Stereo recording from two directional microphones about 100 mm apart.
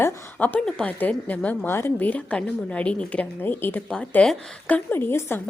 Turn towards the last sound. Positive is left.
turn(degrees=25)  # may be behind; listen again after turning